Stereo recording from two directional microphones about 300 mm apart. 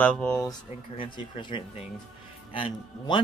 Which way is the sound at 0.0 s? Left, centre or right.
Centre.